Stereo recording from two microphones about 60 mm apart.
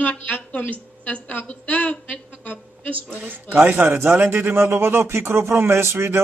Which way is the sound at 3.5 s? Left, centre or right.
Right.